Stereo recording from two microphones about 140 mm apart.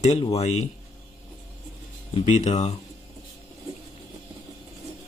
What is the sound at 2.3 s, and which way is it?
Speech, 55° left (ahead or behind).